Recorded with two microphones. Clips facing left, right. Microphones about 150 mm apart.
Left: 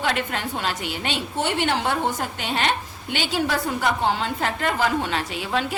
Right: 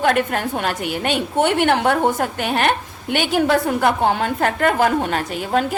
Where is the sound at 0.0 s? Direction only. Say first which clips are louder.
Right 7 dB; 50° right (ahead or behind).